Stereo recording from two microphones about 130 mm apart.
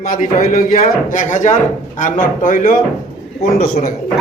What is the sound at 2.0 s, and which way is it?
Speech, 90° left.